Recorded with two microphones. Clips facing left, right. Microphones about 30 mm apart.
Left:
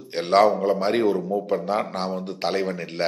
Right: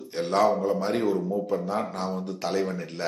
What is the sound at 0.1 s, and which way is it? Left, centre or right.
A man's voice, left.